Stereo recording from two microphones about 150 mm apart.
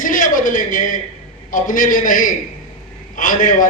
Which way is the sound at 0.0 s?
65° left (ahead or behind).